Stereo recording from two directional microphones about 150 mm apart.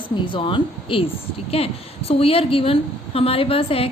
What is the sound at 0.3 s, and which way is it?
A woman's voice, 35° left (ahead or behind).